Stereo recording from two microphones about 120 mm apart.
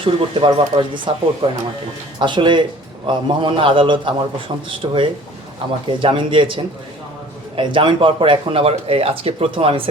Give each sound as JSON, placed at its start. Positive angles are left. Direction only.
{"t": 0.0, "sound": "speech", "side_deg": -50}